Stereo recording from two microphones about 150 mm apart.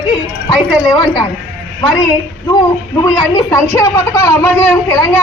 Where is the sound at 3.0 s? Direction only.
20° left (ahead or behind).